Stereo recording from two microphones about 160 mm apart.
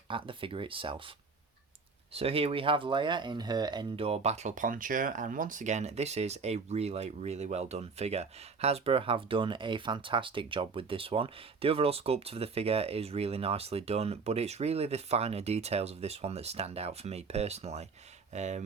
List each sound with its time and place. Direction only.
0.1 s speech: 30° right (ahead or behind)
2.1 s speech: 35° right (ahead or behind)